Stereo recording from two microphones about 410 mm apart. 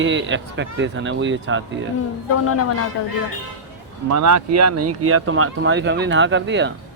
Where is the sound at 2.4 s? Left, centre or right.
Left.